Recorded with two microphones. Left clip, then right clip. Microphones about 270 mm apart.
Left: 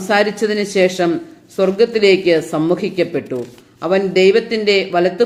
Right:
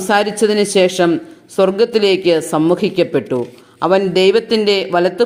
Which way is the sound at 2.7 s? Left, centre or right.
Centre.